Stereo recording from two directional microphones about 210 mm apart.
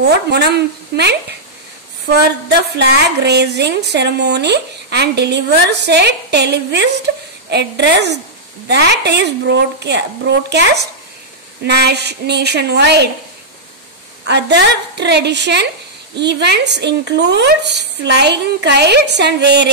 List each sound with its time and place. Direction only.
0.0 s a woman's voice: 50° right (ahead or behind)
2.8 s a woman's voice: 55° right (ahead or behind)
14.2 s a woman's voice: 55° right (ahead or behind)